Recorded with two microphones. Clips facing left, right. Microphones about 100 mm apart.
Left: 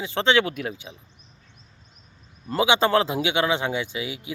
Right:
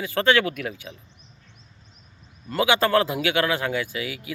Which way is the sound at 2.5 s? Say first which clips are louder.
Even; 25° left (ahead or behind).